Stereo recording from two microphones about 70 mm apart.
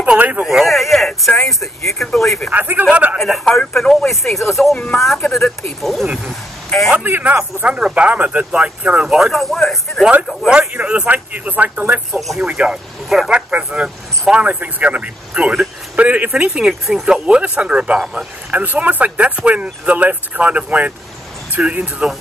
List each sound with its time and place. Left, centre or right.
0.0 s speech: right
0.5 s speech: centre
2.5 s speech: right
3.2 s speech: centre
7.0 s speech: right; by 10.0 s centre
10.7 s speech: centre